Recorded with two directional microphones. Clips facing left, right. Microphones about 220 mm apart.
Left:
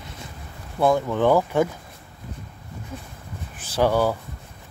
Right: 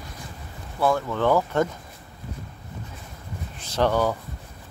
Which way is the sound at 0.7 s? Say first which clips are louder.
Left 3 dB; 20° left (ahead or behind).